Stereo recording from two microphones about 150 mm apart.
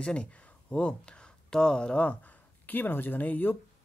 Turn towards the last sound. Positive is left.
turn(degrees=10)  # may be behind; listen again after turning